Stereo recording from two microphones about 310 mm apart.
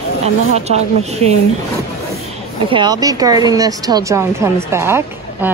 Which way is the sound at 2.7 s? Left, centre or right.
Centre.